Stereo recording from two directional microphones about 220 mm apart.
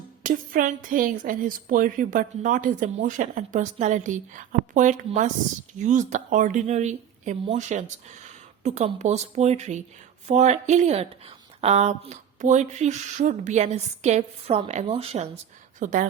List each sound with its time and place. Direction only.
0.2 s speech: 40° right (ahead or behind)